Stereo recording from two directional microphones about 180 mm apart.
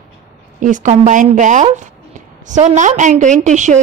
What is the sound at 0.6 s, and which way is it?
Speech, 45° right (ahead or behind).